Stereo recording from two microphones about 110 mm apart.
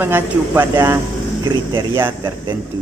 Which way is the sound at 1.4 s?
40° right (ahead or behind).